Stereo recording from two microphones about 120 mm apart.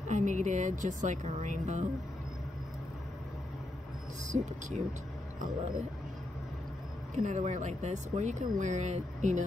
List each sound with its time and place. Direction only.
0.1 s speech: 90° right
4.3 s speech: 80° right
7.2 s speech: 90° right